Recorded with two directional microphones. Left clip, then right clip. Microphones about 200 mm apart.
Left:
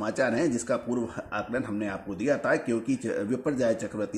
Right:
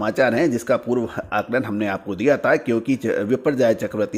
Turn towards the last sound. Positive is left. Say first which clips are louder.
# right 9 dB
turn(degrees=-35)  # may be behind; listen again after turning